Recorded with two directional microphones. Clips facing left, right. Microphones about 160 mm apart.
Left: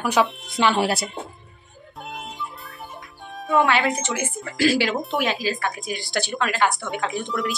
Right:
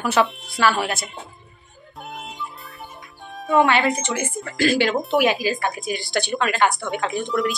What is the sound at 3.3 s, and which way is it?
Speech, centre (ahead or behind).